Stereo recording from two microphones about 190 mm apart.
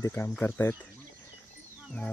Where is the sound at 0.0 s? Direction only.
10° left (ahead or behind).